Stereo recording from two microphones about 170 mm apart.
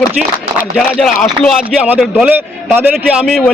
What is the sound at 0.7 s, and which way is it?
A man's voice, centre (ahead or behind).